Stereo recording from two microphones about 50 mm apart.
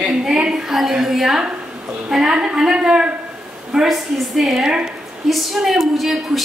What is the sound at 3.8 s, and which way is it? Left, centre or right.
A woman's voice, centre.